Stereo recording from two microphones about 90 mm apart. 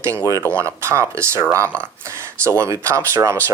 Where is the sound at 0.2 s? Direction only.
40° left (ahead or behind).